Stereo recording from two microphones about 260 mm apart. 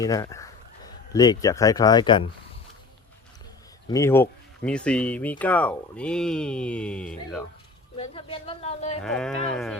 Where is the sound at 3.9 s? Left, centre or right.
Centre.